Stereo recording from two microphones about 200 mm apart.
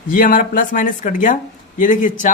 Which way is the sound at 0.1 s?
45° left (ahead or behind).